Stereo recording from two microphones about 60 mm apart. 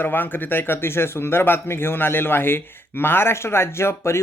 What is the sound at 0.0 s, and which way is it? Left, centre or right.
Speech, left.